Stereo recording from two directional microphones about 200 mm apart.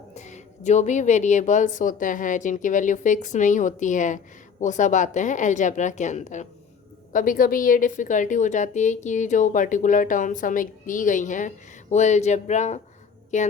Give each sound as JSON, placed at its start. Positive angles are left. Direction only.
{"t": 0.1, "sound": "a woman's voice", "side_deg": 35}